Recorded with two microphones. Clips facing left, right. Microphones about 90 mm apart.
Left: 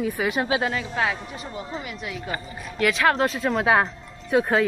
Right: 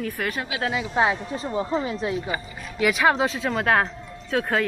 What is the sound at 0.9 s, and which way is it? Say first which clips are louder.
Speech: right 4 dB; 25° right (ahead or behind).